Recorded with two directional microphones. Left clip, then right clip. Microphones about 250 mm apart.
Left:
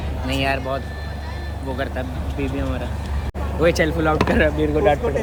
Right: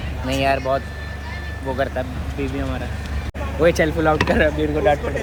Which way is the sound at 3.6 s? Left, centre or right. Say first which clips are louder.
Right 1 dB; centre.